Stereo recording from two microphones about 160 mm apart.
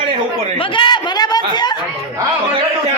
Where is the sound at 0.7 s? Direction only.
30° left (ahead or behind).